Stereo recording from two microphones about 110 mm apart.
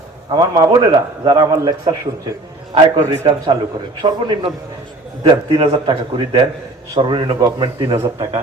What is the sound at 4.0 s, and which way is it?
A man's voice, 45° right (ahead or behind).